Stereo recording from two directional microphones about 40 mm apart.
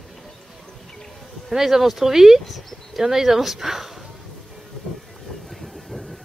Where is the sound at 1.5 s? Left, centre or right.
Centre.